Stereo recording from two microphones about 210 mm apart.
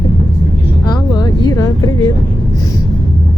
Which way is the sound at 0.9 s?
20° left (ahead or behind).